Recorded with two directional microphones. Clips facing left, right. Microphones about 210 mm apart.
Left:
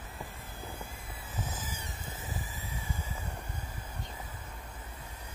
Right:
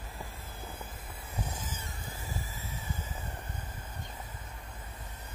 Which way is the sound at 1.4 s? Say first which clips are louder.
Even; 5° left (ahead or behind).